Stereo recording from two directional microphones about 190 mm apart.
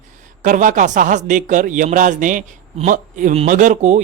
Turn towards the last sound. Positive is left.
turn(degrees=-40)  # may be behind; listen again after turning